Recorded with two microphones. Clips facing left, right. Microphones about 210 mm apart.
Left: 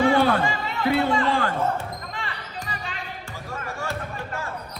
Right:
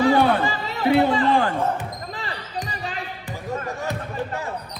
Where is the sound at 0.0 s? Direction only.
30° right (ahead or behind).